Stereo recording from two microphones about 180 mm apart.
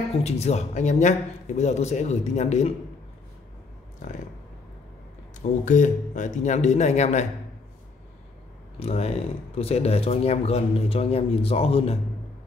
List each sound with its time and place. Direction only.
0.2 s speech: 35° left (ahead or behind)
4.0 s speech: 45° left (ahead or behind)
5.7 s speech: 45° left (ahead or behind)
8.7 s speech: 35° left (ahead or behind)